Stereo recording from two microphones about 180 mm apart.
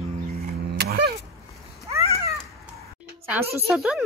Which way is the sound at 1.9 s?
15° right (ahead or behind).